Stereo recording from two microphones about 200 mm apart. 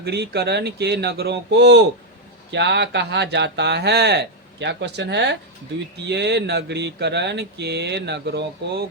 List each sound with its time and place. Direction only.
0.0 s speech: 55° right (ahead or behind)